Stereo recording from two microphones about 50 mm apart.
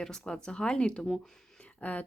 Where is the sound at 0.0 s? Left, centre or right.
Centre.